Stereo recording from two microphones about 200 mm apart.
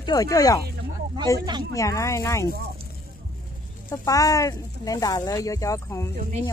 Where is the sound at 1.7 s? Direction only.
15° left (ahead or behind).